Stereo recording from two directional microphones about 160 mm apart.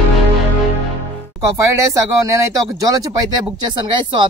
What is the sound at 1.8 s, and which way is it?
A man's voice, 20° right (ahead or behind).